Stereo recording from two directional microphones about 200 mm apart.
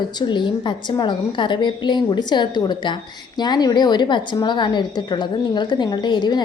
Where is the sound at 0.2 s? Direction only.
25° left (ahead or behind).